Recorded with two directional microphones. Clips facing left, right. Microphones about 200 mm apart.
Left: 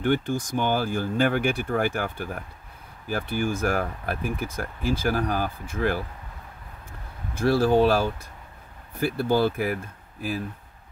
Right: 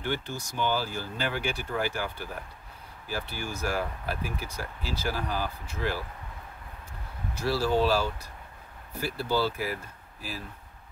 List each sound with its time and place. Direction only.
0.0 s speech: 50° left (ahead or behind)
7.3 s speech: 55° left (ahead or behind)